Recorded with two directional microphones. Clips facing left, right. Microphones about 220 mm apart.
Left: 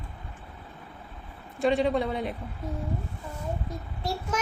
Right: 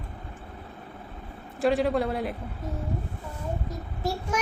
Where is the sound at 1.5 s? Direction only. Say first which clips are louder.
Right 1 dB; 5° right (ahead or behind).